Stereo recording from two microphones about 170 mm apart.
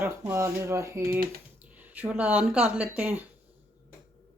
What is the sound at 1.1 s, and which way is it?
Speech, 60° right (ahead or behind).